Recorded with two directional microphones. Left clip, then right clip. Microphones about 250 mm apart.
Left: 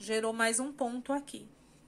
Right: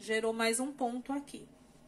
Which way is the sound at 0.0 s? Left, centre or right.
Centre.